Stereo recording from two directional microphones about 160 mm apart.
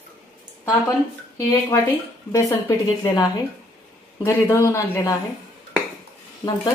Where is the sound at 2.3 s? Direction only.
20° left (ahead or behind).